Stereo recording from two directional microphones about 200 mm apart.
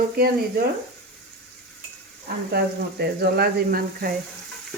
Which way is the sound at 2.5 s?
50° right (ahead or behind).